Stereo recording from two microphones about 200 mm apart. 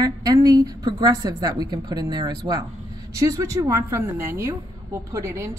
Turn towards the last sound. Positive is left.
turn(degrees=-15)  # may be behind; listen again after turning